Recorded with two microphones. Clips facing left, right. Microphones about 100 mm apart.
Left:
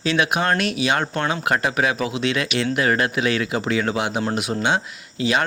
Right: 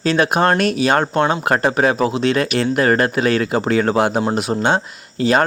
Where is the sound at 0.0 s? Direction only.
40° right (ahead or behind).